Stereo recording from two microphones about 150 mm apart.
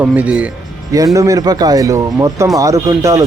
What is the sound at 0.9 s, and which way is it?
Speech, 20° right (ahead or behind).